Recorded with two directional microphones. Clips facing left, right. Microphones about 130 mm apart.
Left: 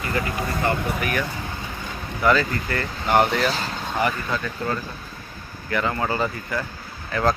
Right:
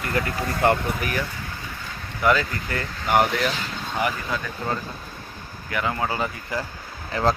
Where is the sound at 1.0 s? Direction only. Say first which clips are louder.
Left 2 dB; 30° right (ahead or behind).